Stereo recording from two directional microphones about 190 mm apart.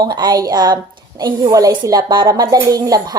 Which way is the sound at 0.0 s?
20° right (ahead or behind).